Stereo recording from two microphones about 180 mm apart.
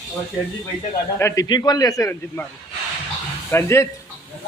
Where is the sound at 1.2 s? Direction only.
15° left (ahead or behind).